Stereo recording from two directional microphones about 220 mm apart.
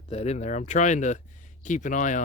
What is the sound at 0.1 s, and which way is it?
Speech, 30° left (ahead or behind).